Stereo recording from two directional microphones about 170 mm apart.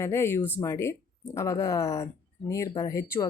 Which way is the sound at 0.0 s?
15° left (ahead or behind).